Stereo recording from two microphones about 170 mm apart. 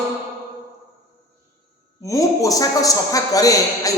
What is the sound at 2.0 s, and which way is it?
A man's voice, 20° left (ahead or behind).